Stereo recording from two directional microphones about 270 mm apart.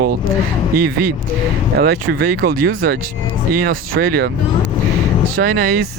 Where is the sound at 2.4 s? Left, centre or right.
Right.